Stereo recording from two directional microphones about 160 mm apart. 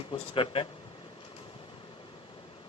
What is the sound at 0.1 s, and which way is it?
Speech, 35° left (ahead or behind).